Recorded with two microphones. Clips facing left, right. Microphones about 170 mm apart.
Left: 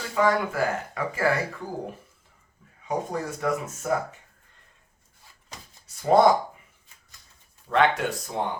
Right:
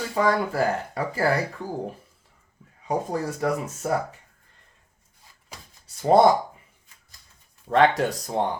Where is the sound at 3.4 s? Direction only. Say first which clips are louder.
Right 2 dB; 35° right (ahead or behind).